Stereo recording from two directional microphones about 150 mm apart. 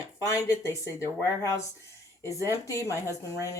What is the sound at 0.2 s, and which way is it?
Speech, 20° left (ahead or behind).